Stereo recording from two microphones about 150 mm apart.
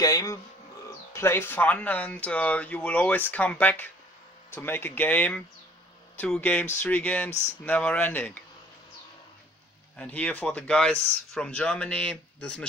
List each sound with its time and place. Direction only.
0.0 s a sound: 25° left (ahead or behind)
1.1 s speech: 15° left (ahead or behind)
9.9 s speech: 10° left (ahead or behind)